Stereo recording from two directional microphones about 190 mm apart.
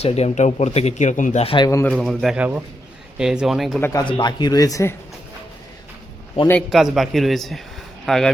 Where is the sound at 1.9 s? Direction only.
Centre (ahead or behind).